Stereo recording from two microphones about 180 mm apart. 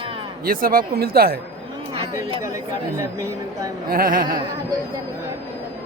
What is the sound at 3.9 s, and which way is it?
Speech, 50° right (ahead or behind).